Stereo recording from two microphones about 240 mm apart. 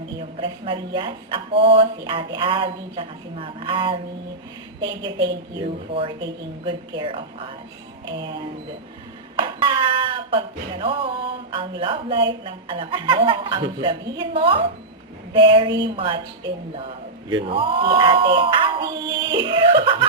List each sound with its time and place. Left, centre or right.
0.2 s a woman's voice: right
9.3 s a sound: right
12.5 s a woman's voice: right